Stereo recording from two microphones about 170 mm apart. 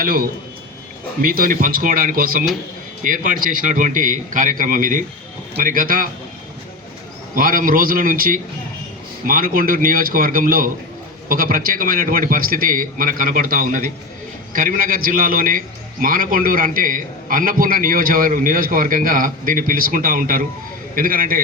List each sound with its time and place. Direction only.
0.0 s a man's voice: 60° right (ahead or behind)
7.3 s a man's voice: 55° right (ahead or behind)